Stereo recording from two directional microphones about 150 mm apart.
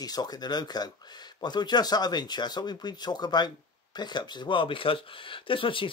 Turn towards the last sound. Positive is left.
turn(degrees=35)  # may be behind; listen again after turning